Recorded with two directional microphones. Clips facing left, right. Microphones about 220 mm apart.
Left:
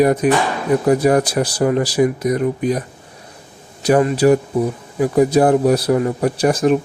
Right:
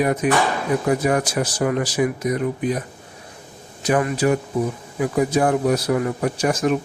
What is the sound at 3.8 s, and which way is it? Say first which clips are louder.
Speech: left 6 dB; 30° left (ahead or behind).